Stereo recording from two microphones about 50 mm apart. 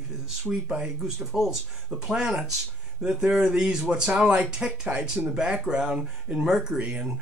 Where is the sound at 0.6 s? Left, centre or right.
Centre.